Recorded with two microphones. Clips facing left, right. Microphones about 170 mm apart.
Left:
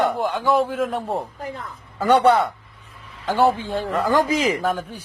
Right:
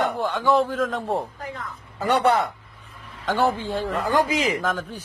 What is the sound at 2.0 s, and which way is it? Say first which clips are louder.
Speech: left 4 dB; 30° left (ahead or behind).